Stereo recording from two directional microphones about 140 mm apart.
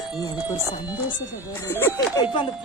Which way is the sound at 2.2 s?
35° left (ahead or behind).